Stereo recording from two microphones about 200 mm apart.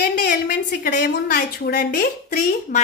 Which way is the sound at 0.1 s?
40° left (ahead or behind).